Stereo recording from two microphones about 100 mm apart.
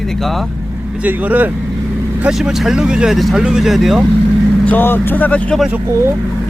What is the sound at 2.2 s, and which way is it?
Speech, 5° right (ahead or behind).